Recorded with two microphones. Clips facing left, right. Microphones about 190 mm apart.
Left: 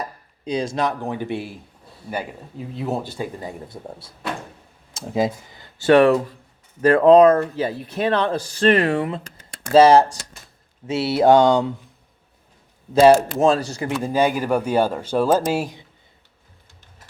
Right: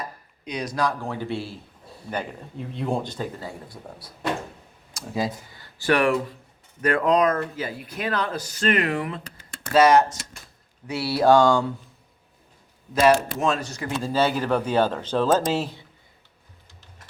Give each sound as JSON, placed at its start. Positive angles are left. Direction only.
{"t": 0.0, "sound": "speech", "side_deg": 30}
{"t": 3.7, "sound": "speech", "side_deg": 25}
{"t": 12.9, "sound": "speech", "side_deg": 25}
{"t": 14.0, "sound": "speech", "side_deg": 15}